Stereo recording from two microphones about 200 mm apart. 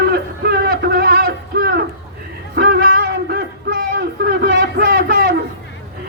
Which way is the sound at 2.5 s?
50° right (ahead or behind).